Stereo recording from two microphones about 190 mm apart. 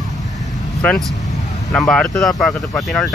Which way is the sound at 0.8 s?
Centre (ahead or behind).